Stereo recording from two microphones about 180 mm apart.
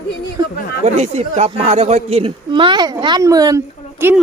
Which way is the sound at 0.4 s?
20° right (ahead or behind).